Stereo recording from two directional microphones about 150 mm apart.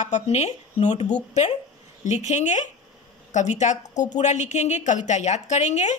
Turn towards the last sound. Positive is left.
turn(degrees=50)  # may be behind; listen again after turning